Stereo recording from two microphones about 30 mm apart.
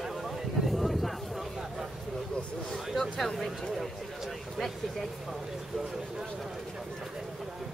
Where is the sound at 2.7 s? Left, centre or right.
Centre.